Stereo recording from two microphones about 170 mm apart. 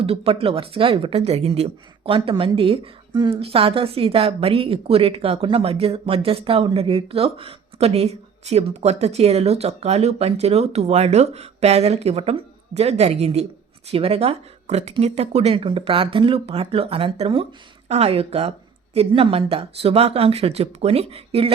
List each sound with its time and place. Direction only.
0.0 s speech: 35° right (ahead or behind)